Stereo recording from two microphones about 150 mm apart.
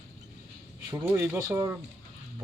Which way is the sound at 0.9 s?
15° right (ahead or behind).